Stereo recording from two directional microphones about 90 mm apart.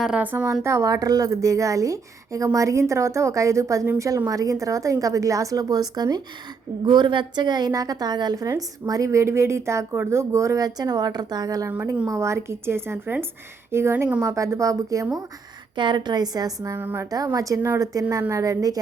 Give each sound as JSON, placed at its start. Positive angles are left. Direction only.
{"t": 0.2, "sound": "a woman's voice", "side_deg": -20}
{"t": 0.6, "sound": "a woman's voice", "side_deg": -30}
{"t": 8.4, "sound": "a woman's voice", "side_deg": -40}
{"t": 15.7, "sound": "a woman's voice", "side_deg": -60}
{"t": 16.7, "sound": "a woman's voice", "side_deg": -30}
{"t": 17.3, "sound": "a woman's voice", "side_deg": -40}